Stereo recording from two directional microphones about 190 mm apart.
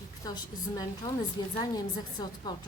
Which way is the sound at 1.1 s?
20° left (ahead or behind).